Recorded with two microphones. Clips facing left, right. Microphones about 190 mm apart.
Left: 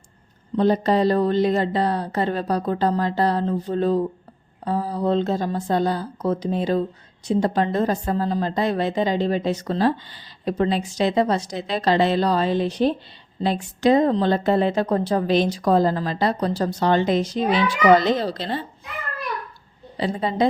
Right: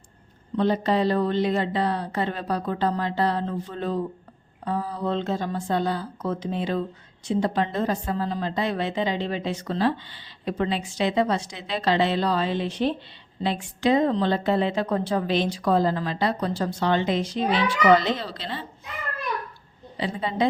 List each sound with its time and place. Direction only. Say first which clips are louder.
0.5 s a woman's voice: left 4 dB; 40° left (ahead or behind)
20.0 s a woman's voice: left 4 dB; 40° left (ahead or behind)